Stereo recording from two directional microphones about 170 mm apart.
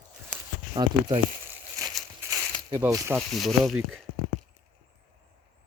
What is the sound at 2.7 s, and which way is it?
Speech, 15° right (ahead or behind).